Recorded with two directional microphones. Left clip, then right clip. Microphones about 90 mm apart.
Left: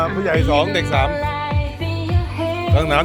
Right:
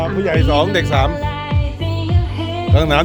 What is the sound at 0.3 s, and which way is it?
Speech, 65° right (ahead or behind).